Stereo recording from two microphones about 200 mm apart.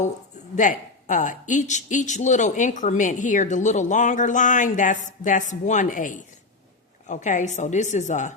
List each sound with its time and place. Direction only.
0.5 s speech: 40° left (ahead or behind)